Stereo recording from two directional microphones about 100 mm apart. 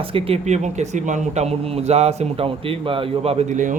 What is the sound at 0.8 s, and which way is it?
A man's voice, 90° right.